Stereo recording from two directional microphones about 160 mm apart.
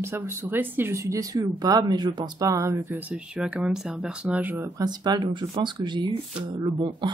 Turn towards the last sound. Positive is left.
turn(degrees=-30)  # may be behind; listen again after turning